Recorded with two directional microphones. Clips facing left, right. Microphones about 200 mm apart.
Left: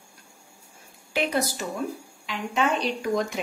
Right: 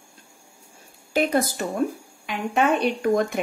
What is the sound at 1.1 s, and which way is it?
A woman's voice, 50° right (ahead or behind).